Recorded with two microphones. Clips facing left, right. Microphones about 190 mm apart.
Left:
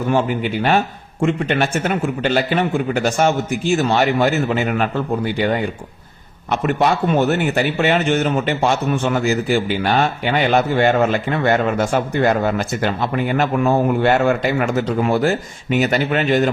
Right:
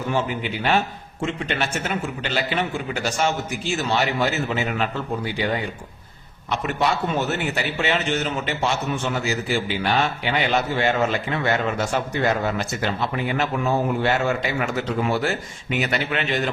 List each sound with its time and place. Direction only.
0.1 s a man's voice: 50° left (ahead or behind)